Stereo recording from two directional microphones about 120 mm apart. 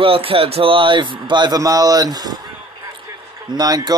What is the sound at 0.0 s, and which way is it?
Speech, 50° right (ahead or behind).